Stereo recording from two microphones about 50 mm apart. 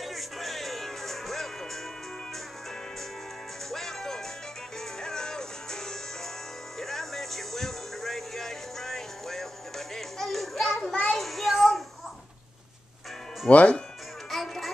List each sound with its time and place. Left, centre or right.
0.0 s music: centre
3.7 s music: centre
11.1 s child singing: centre
13.5 s speech: left
14.3 s music: centre